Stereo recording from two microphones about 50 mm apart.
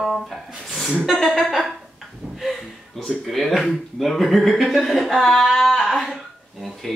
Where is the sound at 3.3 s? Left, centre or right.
Centre.